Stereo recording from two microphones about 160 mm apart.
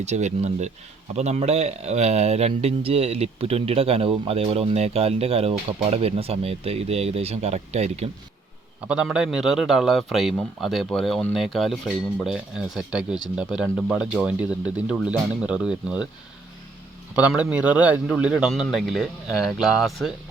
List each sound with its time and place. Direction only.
0.0 s speech: 45° right (ahead or behind)
8.9 s a man's voice: 5° right (ahead or behind)
17.2 s a man's voice: 10° right (ahead or behind)